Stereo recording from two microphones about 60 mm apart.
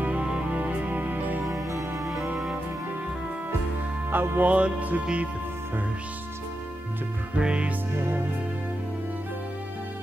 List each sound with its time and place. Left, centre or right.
0.0 s music: right
1.4 s music: right
2.3 s music: centre
4.1 s music: right
4.5 s music: right
7.3 s music: centre